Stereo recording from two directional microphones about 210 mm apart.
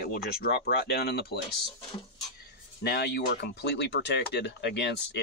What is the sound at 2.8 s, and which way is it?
Speech, 50° left (ahead or behind).